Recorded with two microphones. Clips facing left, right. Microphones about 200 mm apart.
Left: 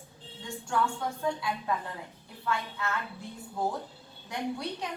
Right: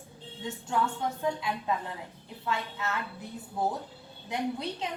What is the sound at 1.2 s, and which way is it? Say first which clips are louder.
A woman's voice: left 1 dB; 20° right (ahead or behind).